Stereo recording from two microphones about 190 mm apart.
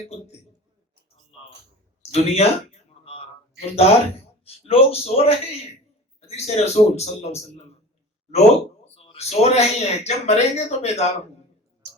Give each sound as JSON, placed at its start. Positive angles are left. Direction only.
{"t": 2.1, "sound": "speech", "side_deg": 35}
{"t": 3.0, "sound": "a sound", "side_deg": 30}
{"t": 4.4, "sound": "speech", "side_deg": 30}